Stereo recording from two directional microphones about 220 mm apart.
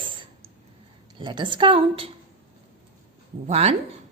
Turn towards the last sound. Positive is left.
turn(degrees=-30)  # may be behind; listen again after turning